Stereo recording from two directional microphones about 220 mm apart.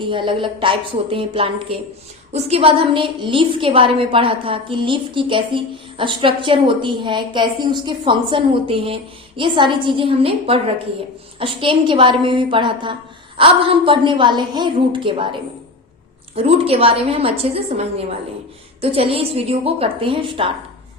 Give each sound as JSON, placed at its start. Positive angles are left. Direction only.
{"t": 0.0, "sound": "a woman's voice", "side_deg": -20}